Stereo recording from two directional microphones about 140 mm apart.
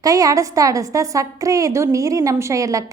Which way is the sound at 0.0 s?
25° right (ahead or behind).